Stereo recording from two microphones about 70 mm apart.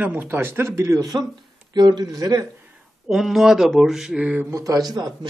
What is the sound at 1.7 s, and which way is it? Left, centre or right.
Speech, right.